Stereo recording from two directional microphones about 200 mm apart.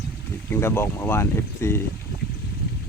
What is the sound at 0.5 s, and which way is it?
Speech, 10° left (ahead or behind).